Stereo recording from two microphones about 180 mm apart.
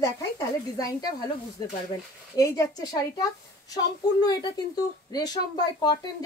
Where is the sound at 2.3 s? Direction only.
20° left (ahead or behind).